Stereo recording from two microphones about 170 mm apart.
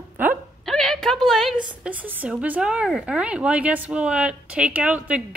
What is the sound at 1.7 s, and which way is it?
Speech, 10° right (ahead or behind).